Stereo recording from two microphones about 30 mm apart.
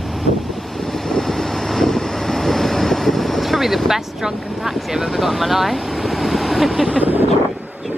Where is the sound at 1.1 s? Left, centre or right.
Centre.